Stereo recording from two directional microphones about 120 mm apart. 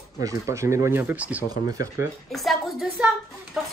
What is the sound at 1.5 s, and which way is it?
Speech, 30° right (ahead or behind).